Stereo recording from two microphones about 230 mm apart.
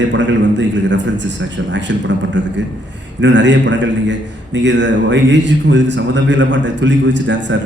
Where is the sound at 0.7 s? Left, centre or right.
Right.